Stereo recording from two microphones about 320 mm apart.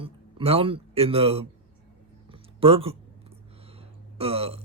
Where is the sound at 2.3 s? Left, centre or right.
Centre.